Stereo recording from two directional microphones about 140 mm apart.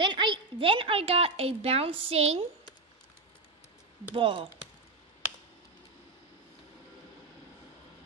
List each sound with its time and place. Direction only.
0.0 s a woman's voice: 35° right (ahead or behind)
4.1 s speech: 40° right (ahead or behind)